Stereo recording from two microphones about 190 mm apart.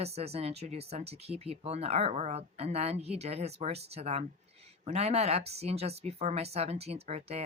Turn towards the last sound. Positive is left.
turn(degrees=-35)  # may be behind; listen again after turning